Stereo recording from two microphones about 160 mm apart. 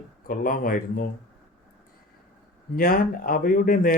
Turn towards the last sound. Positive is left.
turn(degrees=60)  # may be behind; listen again after turning